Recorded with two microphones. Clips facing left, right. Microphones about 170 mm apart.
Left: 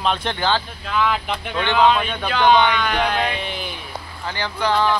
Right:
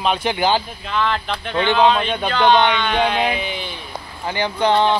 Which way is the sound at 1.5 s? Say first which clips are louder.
Right 2 dB; 15° right (ahead or behind).